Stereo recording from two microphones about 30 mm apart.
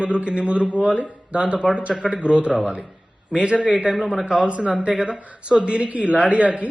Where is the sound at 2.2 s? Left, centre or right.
Right.